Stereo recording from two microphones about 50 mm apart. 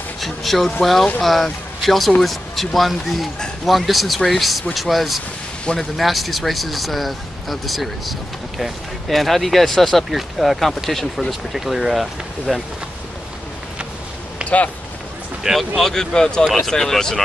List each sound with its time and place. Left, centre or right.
0.2 s speech: centre
14.4 s a sound: right
15.4 s speech: centre
15.8 s speech: centre